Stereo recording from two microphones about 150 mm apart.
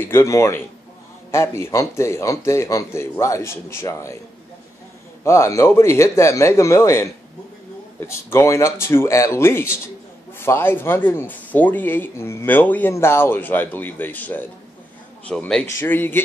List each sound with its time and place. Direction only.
0.0 s a man's voice: 15° left (ahead or behind)
5.2 s a man's voice: 20° left (ahead or behind)
8.1 s a man's voice: 15° left (ahead or behind)
15.6 s speech: 15° left (ahead or behind)